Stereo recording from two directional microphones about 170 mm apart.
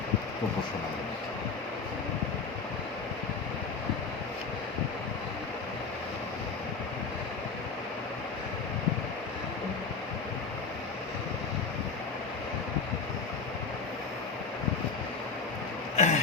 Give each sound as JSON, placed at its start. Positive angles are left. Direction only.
{"t": 16.0, "sound": "throat clearing", "side_deg": 45}